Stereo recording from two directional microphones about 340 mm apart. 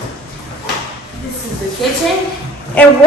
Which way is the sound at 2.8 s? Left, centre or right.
Centre.